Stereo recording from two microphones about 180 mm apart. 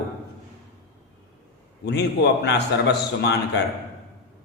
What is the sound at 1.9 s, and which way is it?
A man's voice, 70° left (ahead or behind).